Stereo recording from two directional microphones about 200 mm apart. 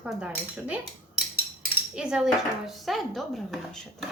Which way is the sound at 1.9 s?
5° right (ahead or behind).